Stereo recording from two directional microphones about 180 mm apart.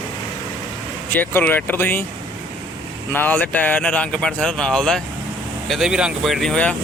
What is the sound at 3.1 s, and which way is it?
Speech, 10° left (ahead or behind).